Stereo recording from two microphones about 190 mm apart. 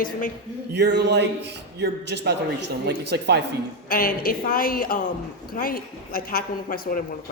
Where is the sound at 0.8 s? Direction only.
65° right (ahead or behind).